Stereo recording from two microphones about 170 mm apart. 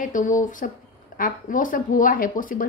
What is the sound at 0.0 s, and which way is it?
Speech, 50° left (ahead or behind).